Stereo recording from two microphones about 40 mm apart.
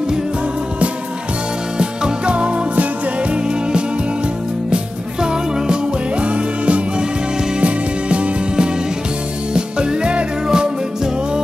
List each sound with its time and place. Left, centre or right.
1.8 s music: right
6.2 s music: right